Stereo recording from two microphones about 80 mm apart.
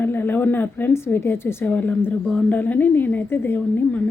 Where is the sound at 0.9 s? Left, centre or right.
Left.